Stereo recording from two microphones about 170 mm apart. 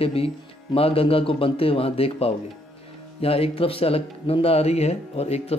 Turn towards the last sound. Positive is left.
turn(degrees=40)  # may be behind; listen again after turning